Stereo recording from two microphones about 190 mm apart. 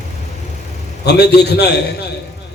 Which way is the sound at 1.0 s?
60° left (ahead or behind).